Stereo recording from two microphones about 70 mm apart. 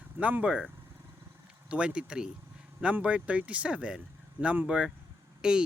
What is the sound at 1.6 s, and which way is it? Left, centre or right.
Speech, centre.